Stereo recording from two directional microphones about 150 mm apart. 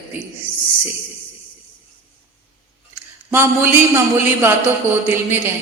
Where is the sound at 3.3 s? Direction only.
15° right (ahead or behind).